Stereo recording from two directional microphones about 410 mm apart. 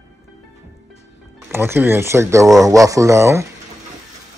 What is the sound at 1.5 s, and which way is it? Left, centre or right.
Speech, centre.